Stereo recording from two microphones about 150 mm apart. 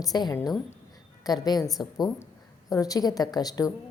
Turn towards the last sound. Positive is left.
turn(degrees=25)  # may be behind; listen again after turning